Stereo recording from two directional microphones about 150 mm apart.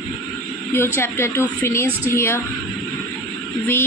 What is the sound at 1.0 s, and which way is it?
A woman's voice, 15° left (ahead or behind).